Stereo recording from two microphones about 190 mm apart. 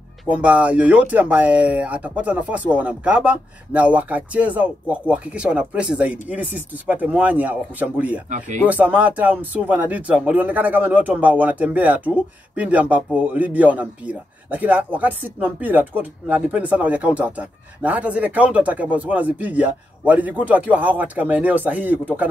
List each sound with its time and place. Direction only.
0.2 s a man's voice: 5° right (ahead or behind)
8.3 s speech: 40° right (ahead or behind)
8.6 s a man's voice: 10° right (ahead or behind)